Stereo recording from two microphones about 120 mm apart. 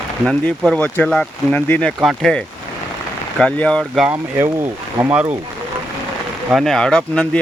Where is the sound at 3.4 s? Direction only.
5° left (ahead or behind).